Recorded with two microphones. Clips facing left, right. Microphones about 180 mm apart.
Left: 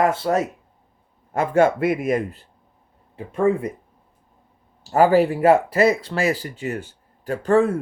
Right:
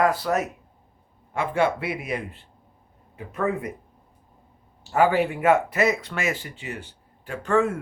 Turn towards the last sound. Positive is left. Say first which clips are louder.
# left 5 dB
turn(degrees=35)  # may be behind; listen again after turning